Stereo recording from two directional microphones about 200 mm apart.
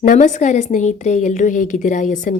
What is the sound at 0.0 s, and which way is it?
A woman's voice, 40° left (ahead or behind).